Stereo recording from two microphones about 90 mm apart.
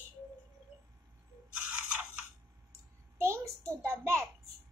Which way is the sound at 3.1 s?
35° right (ahead or behind).